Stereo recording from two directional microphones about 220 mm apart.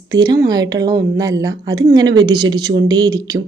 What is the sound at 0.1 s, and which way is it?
Speech, 15° right (ahead or behind).